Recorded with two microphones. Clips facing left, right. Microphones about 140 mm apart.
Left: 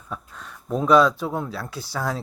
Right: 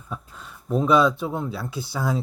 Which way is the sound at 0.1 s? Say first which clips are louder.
Left 1 dB; centre (ahead or behind).